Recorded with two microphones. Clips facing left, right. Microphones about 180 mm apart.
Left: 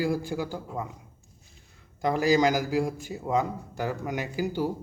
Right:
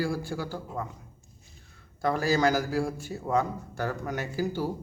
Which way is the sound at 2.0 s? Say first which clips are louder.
Left 2 dB; 15° left (ahead or behind).